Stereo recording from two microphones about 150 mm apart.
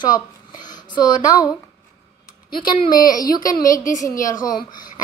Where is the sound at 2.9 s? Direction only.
25° left (ahead or behind).